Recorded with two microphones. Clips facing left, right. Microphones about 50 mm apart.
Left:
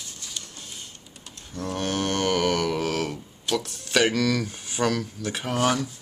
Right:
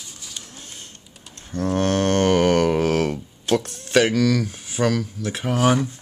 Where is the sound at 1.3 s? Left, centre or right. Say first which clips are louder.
Right 8 dB; right.